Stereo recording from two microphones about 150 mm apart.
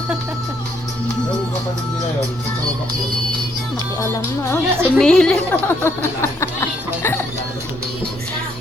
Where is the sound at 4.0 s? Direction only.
15° left (ahead or behind).